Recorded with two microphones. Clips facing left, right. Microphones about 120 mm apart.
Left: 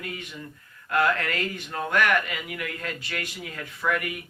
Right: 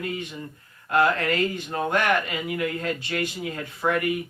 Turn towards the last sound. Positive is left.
turn(degrees=-25)  # may be behind; listen again after turning